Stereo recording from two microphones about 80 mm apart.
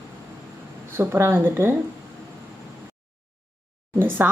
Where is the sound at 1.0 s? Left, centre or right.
Right.